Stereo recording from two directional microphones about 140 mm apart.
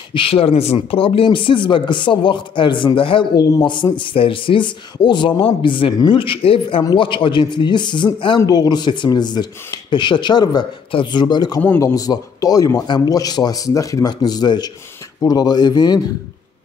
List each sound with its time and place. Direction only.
0.1 s speech: 40° left (ahead or behind)